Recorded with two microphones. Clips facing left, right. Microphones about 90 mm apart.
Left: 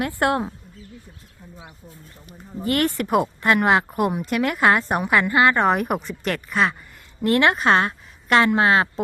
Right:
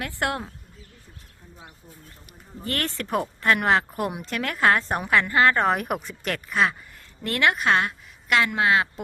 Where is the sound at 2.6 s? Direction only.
15° left (ahead or behind); by 6.7 s centre (ahead or behind).